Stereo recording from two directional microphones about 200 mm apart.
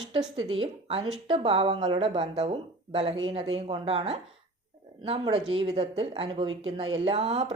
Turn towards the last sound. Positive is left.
turn(degrees=-30)  # may be behind; listen again after turning